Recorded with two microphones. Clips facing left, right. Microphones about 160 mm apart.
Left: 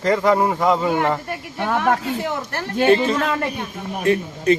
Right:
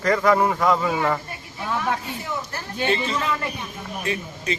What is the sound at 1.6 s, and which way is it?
Speech, 70° left (ahead or behind).